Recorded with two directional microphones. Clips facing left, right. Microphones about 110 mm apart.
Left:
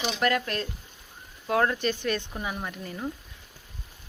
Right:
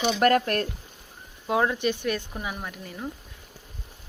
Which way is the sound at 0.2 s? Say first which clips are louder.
Right 5 dB; 45° right (ahead or behind).